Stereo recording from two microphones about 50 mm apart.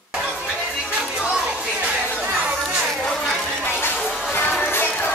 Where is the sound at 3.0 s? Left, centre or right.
Centre.